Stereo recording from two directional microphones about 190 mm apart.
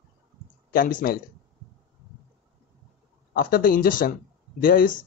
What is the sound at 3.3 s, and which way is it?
Speech, 50° left (ahead or behind).